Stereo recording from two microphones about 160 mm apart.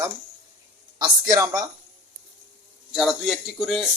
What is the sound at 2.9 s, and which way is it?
Speech, centre (ahead or behind).